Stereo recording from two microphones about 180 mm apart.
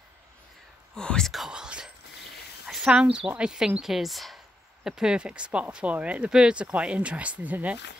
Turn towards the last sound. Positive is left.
turn(degrees=-10)  # may be behind; listen again after turning